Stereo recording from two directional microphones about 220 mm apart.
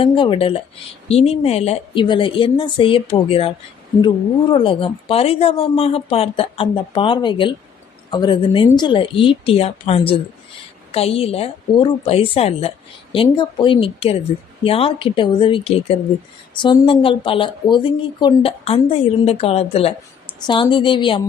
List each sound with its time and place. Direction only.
0.0 s a woman's voice: 25° left (ahead or behind)
4.5 s a woman's voice: 25° left (ahead or behind)